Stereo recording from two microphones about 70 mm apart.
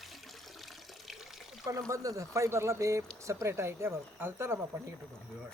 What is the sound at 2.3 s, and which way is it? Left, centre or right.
Speech, right.